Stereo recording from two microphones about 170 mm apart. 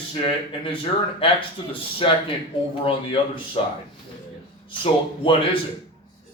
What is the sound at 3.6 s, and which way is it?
Speech, 35° left (ahead or behind).